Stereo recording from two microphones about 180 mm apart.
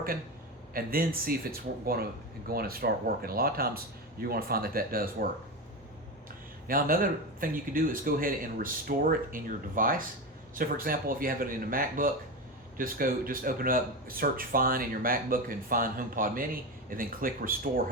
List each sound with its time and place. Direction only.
0.7 s speech: 55° right (ahead or behind)
6.7 s speech: 50° right (ahead or behind)